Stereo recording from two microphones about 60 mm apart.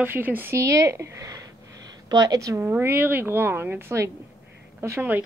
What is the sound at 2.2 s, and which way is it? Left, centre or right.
Speech, right.